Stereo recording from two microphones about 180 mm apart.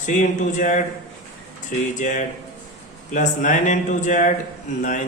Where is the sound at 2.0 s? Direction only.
40° left (ahead or behind).